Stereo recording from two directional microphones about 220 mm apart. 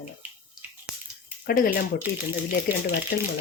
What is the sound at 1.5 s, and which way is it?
Speech, 40° left (ahead or behind).